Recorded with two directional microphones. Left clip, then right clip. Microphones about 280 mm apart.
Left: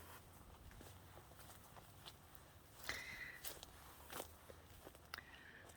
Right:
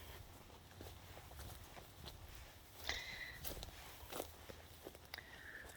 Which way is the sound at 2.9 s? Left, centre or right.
Centre.